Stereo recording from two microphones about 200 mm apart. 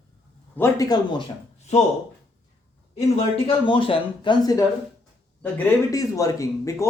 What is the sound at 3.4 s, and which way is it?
Speech, 25° left (ahead or behind).